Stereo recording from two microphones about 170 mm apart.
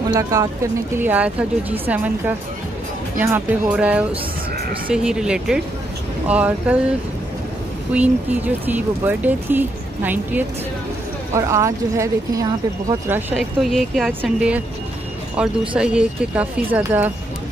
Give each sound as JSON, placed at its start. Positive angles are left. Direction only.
{"t": 0.1, "sound": "speech", "side_deg": -20}
{"t": 0.9, "sound": "speech", "side_deg": -10}
{"t": 7.9, "sound": "speech", "side_deg": -10}
{"t": 13.4, "sound": "speech", "side_deg": 0}
{"t": 15.7, "sound": "speech", "side_deg": -5}